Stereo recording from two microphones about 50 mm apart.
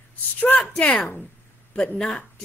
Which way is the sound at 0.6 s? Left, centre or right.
Centre.